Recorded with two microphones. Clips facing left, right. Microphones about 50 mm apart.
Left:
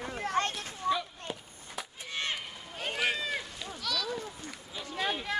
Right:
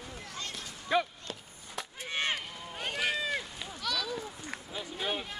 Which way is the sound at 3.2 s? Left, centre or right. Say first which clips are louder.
Right 1 dB; centre.